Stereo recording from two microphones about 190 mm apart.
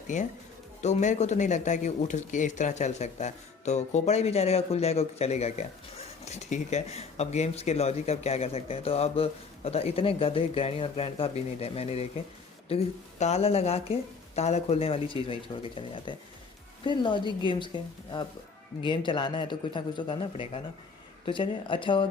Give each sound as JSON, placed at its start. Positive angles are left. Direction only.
{"t": 0.1, "sound": "speech", "side_deg": 40}
{"t": 18.8, "sound": "speech", "side_deg": 25}